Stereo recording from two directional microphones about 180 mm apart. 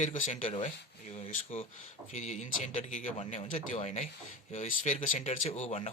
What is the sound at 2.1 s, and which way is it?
Speech, 40° left (ahead or behind).